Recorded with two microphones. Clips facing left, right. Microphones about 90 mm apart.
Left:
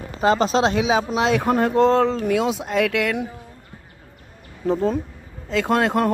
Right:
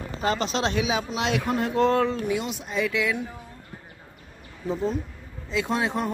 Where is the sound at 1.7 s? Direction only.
30° left (ahead or behind).